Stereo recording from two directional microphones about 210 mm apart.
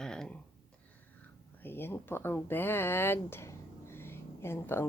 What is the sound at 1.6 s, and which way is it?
Speech, 10° left (ahead or behind).